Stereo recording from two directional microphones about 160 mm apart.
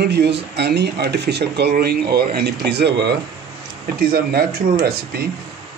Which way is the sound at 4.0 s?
75° right (ahead or behind).